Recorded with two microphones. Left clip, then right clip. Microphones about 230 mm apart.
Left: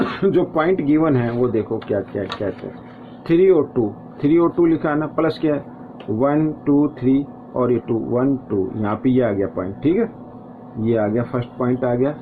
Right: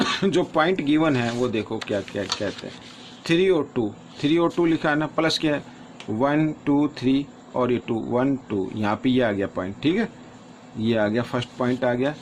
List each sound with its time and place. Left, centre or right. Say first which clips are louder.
0.0 s speech: left 4 dB; right